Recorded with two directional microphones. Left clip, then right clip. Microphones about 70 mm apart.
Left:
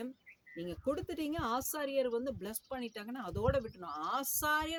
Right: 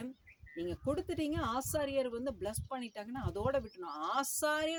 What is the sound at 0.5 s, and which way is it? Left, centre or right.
Speech, left.